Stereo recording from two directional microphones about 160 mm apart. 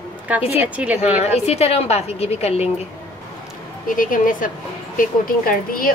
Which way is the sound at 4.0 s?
55° left (ahead or behind).